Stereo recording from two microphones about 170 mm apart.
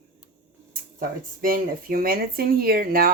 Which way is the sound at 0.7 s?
60° right (ahead or behind).